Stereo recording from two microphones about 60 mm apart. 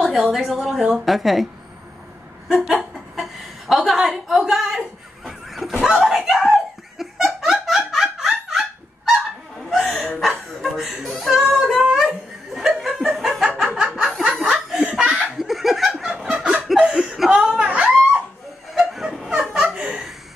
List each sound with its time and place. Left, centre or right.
0.1 s a woman's voice: centre
2.7 s chuckle: centre
5.9 s laughter: centre
9.7 s hiccup: centre
10.6 s a sound: centre
12.5 s laughter: centre
13.2 s a sound: centre
14.4 s laughter: centre
15.3 s laughter: centre
16.3 s a sound: centre
18.8 s laughter: centre